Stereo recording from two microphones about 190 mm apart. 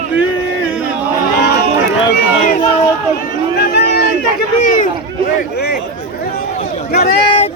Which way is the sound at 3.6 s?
60° left (ahead or behind).